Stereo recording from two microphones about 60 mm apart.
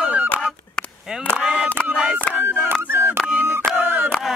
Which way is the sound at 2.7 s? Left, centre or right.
Right.